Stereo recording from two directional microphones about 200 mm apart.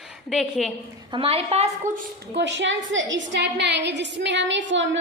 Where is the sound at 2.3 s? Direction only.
65° right (ahead or behind).